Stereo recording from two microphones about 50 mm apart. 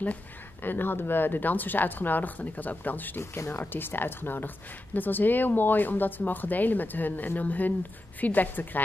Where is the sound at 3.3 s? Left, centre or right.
Left.